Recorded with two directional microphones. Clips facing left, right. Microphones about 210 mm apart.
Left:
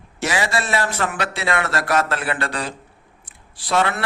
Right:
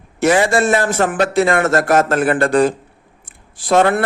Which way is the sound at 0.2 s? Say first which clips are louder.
Right 9 dB; 50° right (ahead or behind).